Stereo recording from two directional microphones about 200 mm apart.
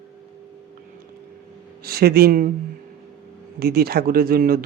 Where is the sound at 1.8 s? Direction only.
50° right (ahead or behind).